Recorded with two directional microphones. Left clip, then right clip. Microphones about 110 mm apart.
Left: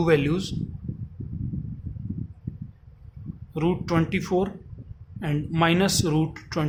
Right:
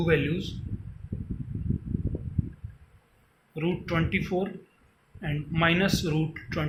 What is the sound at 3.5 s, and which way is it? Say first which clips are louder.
Speech: left 4 dB; 90° left.